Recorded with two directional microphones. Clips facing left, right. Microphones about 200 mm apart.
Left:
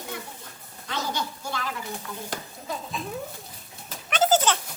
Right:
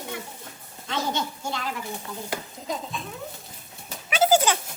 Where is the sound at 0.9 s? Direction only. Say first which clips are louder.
Right 2 dB; 25° right (ahead or behind).